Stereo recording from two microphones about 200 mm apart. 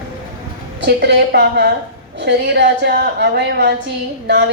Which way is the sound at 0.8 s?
55° right (ahead or behind).